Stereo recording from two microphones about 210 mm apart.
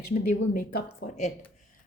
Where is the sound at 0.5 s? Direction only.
40° left (ahead or behind).